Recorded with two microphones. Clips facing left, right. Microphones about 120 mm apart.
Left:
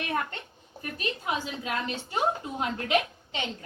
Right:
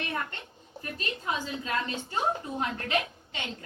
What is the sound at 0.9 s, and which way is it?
A woman's voice, 15° left (ahead or behind).